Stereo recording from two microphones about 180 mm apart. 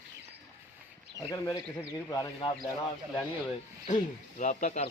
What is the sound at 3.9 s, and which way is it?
Speech, 45° left (ahead or behind).